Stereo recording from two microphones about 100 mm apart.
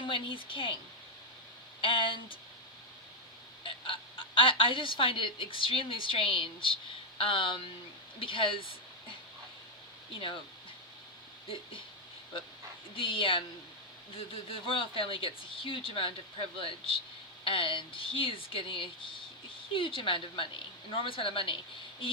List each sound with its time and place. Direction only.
0.0 s speech: 60° left (ahead or behind)
1.8 s speech: 60° left (ahead or behind)
3.6 s a woman's voice: 60° left (ahead or behind)
13.0 s speech: 60° left (ahead or behind)
14.5 s speech: 60° left (ahead or behind)